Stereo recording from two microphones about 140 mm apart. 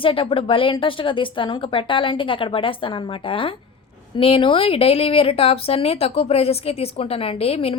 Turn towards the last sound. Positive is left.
turn(degrees=45)  # may be behind; listen again after turning